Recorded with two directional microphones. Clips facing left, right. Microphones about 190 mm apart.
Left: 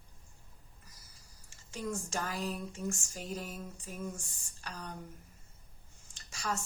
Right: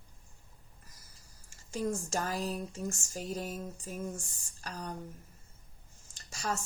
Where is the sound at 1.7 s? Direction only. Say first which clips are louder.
Right 4 dB; 40° right (ahead or behind).